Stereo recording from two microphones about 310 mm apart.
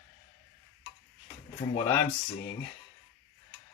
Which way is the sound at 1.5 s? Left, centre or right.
Centre.